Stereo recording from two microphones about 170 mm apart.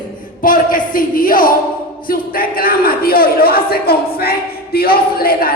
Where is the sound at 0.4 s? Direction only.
55° left (ahead or behind).